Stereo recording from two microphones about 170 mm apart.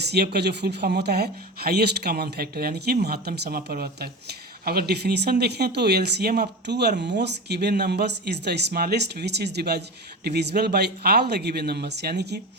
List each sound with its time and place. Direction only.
0.0 s speech: 75° right (ahead or behind)
7.0 s speech: 90° right